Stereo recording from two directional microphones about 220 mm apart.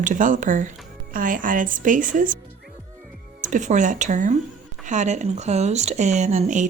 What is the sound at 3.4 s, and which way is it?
Speech, 35° right (ahead or behind).